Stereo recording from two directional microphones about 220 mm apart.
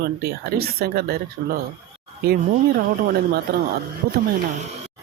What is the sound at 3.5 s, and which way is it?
Speech, 45° right (ahead or behind).